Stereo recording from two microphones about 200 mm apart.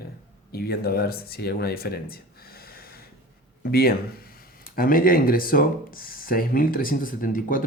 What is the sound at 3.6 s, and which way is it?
Speech, 50° left (ahead or behind).